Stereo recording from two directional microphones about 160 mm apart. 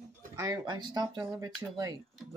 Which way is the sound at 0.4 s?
25° right (ahead or behind).